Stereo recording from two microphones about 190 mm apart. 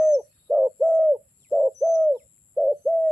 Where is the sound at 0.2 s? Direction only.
Centre (ahead or behind).